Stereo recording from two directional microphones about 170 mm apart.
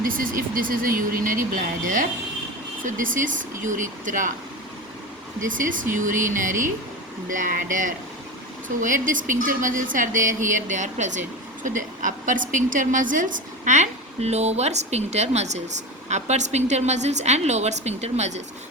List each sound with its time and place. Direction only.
0.0 s speech: 55° right (ahead or behind)
2.8 s a woman's voice: 50° right (ahead or behind)
5.4 s a woman's voice: 50° right (ahead or behind)